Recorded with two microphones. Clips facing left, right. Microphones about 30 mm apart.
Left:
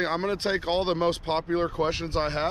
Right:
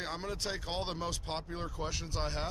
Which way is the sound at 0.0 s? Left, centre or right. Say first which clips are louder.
Left 11 dB; left.